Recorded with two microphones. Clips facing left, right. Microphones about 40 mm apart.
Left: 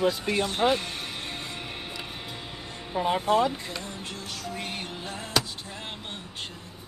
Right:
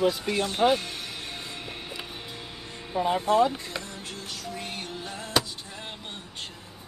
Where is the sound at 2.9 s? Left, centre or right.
Centre.